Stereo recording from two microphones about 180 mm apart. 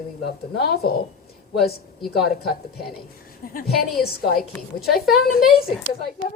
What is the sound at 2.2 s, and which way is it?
A woman's voice, 60° left (ahead or behind).